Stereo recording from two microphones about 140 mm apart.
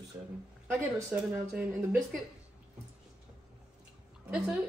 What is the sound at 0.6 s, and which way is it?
A woman's voice, 15° right (ahead or behind).